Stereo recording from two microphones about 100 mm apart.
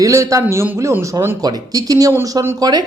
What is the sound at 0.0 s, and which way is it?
Speech, 30° right (ahead or behind).